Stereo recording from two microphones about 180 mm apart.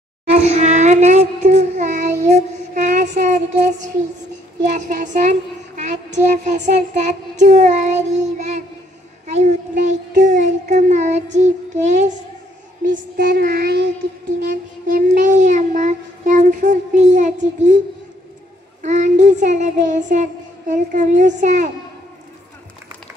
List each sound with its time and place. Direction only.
0.3 s child singing: 40° right (ahead or behind)
3.2 s a sound: 45° right (ahead or behind)
4.6 s child singing: 40° right (ahead or behind)
13.2 s child singing: 55° right (ahead or behind)
18.8 s child singing: 40° right (ahead or behind)
20.1 s a woman's voice: 45° right (ahead or behind)
21.4 s child singing: 45° right (ahead or behind)